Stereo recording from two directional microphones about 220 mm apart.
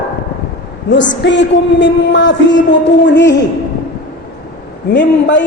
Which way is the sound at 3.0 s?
50° left (ahead or behind).